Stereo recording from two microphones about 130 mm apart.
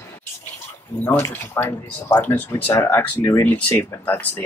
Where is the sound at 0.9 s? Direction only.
10° left (ahead or behind).